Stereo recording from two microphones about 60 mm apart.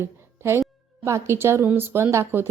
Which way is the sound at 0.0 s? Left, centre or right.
Right.